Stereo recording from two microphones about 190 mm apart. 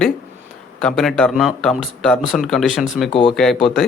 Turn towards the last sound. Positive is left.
turn(degrees=0)  # may be behind; listen again after turning